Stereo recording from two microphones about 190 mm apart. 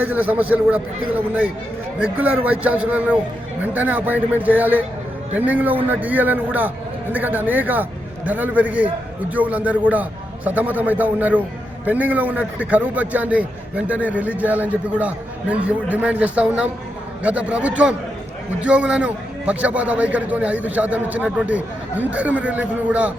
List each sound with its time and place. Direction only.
0.0 s a man's voice: 10° right (ahead or behind)